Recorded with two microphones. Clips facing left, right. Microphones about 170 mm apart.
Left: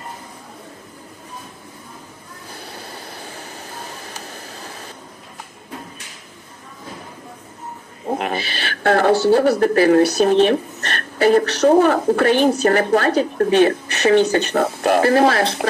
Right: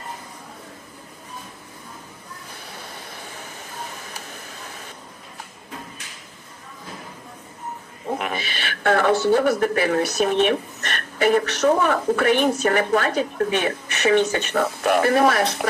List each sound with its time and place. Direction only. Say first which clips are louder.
2.6 s vehicle: left 5 dB; 35° left (ahead or behind)
8.1 s speech: left 4 dB; 35° left (ahead or behind)